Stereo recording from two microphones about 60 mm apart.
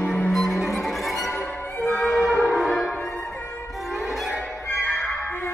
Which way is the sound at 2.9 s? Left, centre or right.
Left.